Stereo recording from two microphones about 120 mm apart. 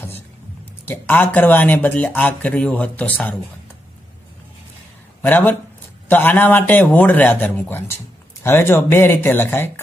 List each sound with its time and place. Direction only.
0.8 s speech: 15° left (ahead or behind)
5.2 s speech: 15° left (ahead or behind)